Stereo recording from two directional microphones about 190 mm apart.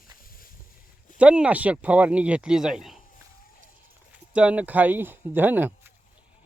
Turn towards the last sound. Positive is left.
turn(degrees=-10)  # may be behind; listen again after turning